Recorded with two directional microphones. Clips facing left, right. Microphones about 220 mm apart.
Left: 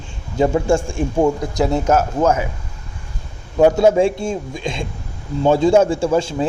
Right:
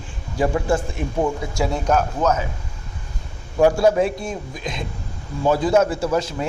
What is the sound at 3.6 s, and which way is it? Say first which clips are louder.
A man's voice: left 3 dB; 20° left (ahead or behind).